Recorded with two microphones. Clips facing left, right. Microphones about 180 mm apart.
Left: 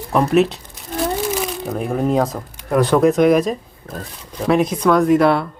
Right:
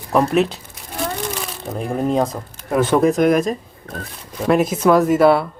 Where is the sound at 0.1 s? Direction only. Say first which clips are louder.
Left 1 dB; centre (ahead or behind).